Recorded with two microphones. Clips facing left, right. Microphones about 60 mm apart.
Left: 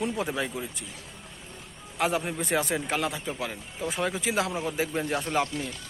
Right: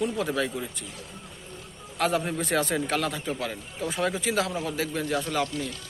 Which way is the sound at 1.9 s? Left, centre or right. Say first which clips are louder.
Right 1 dB; centre.